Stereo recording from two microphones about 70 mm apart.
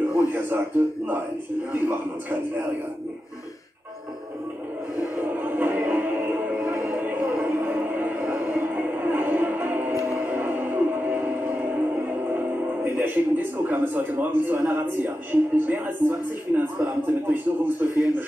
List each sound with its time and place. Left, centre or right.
0.0 s a man's voice: right
5.1 s music: right
6.5 s music: centre
12.3 s speech: right